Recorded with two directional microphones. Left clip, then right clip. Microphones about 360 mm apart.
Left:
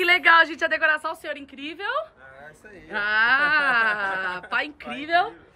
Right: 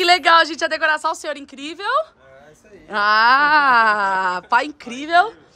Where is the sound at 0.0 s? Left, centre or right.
Centre.